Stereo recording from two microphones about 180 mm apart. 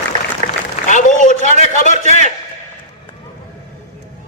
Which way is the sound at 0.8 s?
45° left (ahead or behind).